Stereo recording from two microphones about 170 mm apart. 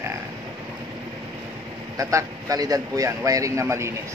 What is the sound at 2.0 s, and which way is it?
Speech, 20° right (ahead or behind).